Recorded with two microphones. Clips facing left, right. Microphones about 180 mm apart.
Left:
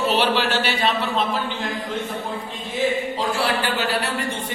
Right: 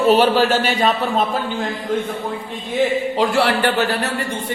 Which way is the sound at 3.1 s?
70° right (ahead or behind).